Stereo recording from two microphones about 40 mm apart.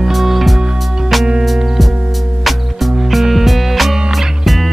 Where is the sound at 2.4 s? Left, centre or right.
Centre.